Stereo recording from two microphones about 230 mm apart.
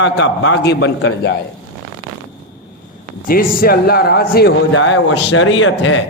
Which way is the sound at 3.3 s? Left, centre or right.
Left.